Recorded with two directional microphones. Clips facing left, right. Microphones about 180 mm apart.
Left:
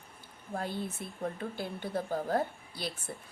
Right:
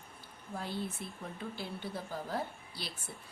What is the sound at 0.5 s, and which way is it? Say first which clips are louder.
Speech: left 3 dB; 50° left (ahead or behind).